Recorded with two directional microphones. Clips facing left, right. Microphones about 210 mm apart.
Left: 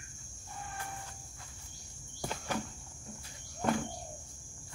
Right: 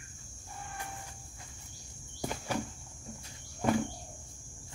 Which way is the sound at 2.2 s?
10° right (ahead or behind).